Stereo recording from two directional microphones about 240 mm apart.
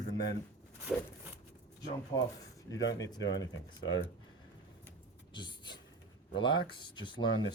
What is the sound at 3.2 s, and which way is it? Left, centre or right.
Speech, left.